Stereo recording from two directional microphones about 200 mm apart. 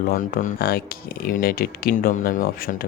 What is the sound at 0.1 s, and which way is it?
Speech, 40° left (ahead or behind).